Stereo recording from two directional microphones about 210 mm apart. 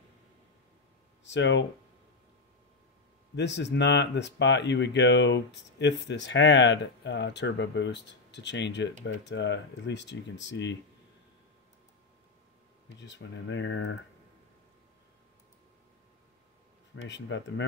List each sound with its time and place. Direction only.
1.2 s speech: 55° left (ahead or behind)
3.3 s speech: 55° left (ahead or behind)
13.0 s speech: 60° left (ahead or behind)
16.9 s speech: 60° left (ahead or behind)